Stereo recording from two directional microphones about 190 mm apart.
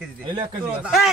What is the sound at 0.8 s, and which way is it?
Speech, centre (ahead or behind).